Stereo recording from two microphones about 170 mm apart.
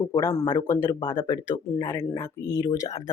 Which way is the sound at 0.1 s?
20° left (ahead or behind).